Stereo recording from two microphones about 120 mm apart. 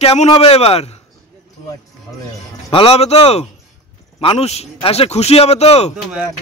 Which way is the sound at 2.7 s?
55° left (ahead or behind).